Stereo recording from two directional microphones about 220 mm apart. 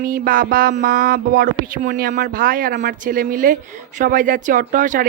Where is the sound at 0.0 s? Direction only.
40° right (ahead or behind).